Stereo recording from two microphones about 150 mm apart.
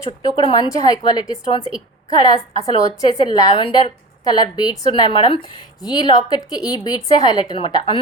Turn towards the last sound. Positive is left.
turn(degrees=35)  # may be behind; listen again after turning